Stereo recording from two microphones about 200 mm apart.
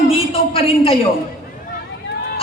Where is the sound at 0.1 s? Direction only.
30° left (ahead or behind).